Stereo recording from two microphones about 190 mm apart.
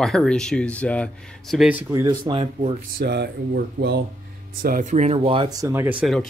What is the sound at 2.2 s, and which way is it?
Speech, 30° right (ahead or behind).